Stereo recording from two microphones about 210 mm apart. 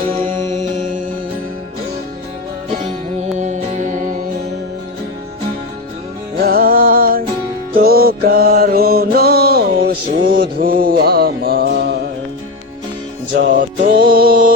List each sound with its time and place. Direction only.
3.3 s music: 35° right (ahead or behind)
6.4 s music: 45° right (ahead or behind)
7.8 s mantra: 45° right (ahead or behind)
13.6 s music: 40° right (ahead or behind)